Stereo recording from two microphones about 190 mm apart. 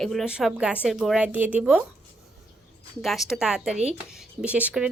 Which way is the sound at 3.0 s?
Centre (ahead or behind).